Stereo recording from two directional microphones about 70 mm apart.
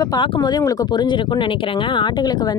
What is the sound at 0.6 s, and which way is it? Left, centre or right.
Speech, left.